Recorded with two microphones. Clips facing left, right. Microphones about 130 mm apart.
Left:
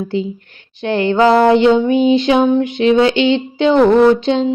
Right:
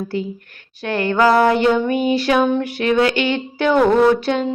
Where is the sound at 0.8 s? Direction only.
25° left (ahead or behind).